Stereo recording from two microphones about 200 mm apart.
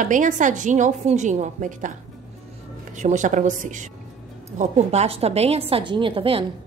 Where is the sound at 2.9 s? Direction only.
35° right (ahead or behind).